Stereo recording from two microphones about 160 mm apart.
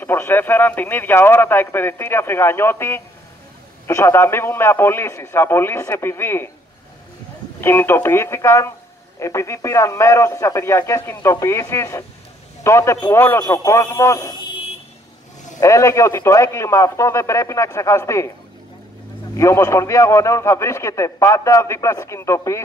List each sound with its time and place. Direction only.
0.0 s speech: 15° left (ahead or behind)
7.6 s speech: 15° left (ahead or behind)
15.6 s speech: 20° left (ahead or behind)
19.3 s a man's voice: 20° left (ahead or behind)